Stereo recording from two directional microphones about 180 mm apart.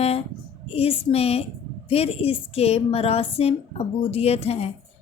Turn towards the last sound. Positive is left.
turn(degrees=35)  # may be behind; listen again after turning